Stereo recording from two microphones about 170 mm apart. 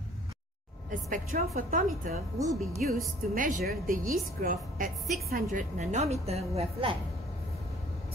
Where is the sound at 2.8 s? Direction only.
50° right (ahead or behind).